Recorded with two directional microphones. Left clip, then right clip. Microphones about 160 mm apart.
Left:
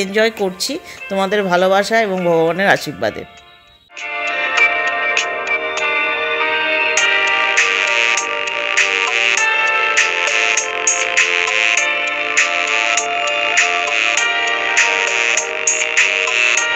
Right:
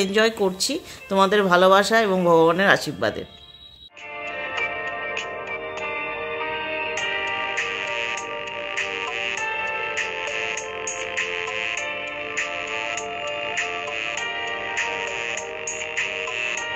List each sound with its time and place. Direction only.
0.1 s speech: 15° left (ahead or behind)
4.6 s music: 35° left (ahead or behind)